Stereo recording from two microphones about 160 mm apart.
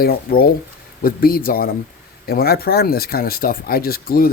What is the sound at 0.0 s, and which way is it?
A man's voice, 70° left (ahead or behind).